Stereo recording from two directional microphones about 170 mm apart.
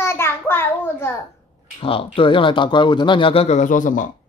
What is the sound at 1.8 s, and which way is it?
Speech, 30° left (ahead or behind).